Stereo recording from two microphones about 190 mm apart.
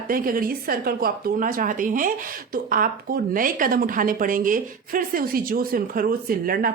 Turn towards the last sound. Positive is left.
turn(degrees=-50)  # may be behind; listen again after turning